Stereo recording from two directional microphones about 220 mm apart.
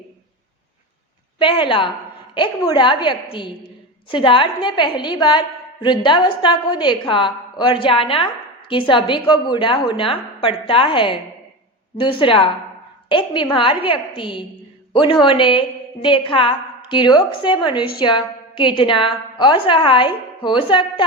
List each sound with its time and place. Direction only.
1.4 s a woman's voice: 20° left (ahead or behind)